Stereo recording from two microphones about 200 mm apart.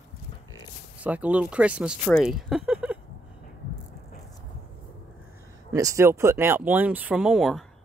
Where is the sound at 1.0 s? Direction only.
5° right (ahead or behind).